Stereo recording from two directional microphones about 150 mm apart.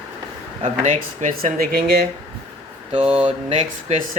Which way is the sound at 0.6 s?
60° right (ahead or behind).